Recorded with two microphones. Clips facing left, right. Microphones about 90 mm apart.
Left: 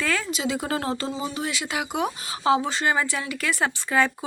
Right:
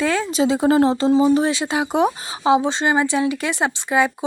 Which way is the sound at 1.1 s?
55° right (ahead or behind).